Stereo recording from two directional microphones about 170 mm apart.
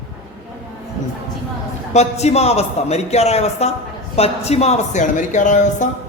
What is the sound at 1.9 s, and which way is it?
A man's voice, 40° left (ahead or behind).